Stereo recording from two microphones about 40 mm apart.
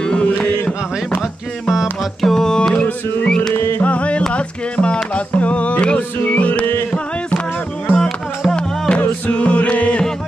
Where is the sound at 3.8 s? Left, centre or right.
Left.